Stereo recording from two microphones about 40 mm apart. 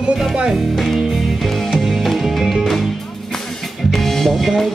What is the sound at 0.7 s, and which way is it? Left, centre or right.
Music, centre.